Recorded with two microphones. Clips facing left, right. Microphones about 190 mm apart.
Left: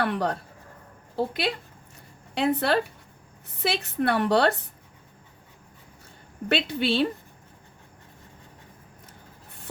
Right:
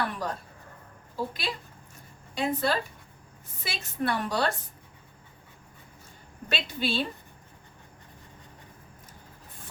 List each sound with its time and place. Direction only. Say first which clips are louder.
0.1 s a woman's voice: left 7 dB; 65° left (ahead or behind)
6.5 s a woman's voice: left 6 dB; 65° left (ahead or behind)